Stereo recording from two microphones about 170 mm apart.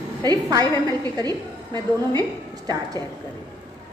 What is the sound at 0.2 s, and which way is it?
A woman's voice, 25° right (ahead or behind).